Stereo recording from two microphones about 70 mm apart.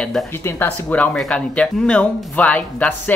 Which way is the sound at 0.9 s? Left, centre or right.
Centre.